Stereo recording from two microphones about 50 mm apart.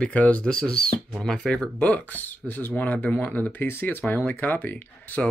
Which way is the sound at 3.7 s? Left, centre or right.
Left.